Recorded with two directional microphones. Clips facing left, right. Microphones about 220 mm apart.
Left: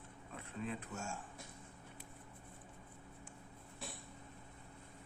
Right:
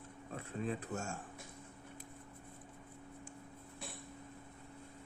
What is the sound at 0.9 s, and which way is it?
Speech, 50° right (ahead or behind).